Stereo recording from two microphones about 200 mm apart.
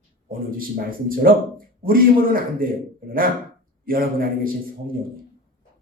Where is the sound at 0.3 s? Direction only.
45° right (ahead or behind).